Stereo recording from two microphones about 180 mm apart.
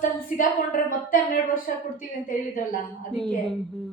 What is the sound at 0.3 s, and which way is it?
A woman's voice, 50° left (ahead or behind).